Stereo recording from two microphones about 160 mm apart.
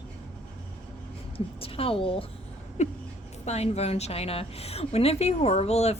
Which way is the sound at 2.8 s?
45° left (ahead or behind).